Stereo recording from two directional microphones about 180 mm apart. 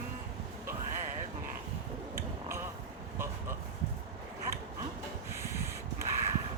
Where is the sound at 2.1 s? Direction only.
15° right (ahead or behind).